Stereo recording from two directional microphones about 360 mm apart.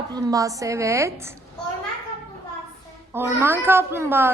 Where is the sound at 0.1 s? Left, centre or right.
Centre.